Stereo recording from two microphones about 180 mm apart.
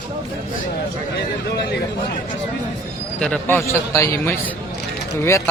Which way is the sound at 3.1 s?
5° left (ahead or behind).